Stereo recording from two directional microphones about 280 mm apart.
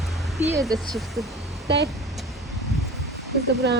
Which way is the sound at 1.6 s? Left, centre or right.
Right.